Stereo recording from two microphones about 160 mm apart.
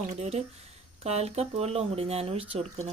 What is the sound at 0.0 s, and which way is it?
Speech, 45° right (ahead or behind).